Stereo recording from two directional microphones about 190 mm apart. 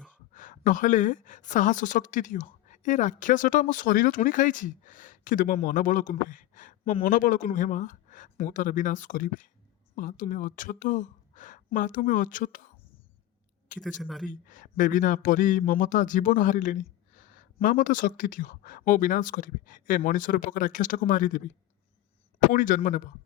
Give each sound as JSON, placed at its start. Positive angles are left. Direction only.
{"t": 0.3, "sound": "speech", "side_deg": 45}
{"t": 13.7, "sound": "speech", "side_deg": 0}
{"t": 14.3, "sound": "speech", "side_deg": 45}
{"t": 22.5, "sound": "speech", "side_deg": 45}